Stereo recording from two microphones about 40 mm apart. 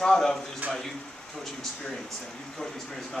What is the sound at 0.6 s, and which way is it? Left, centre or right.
Speech, right.